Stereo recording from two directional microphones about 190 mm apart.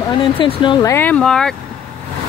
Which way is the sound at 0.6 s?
25° left (ahead or behind).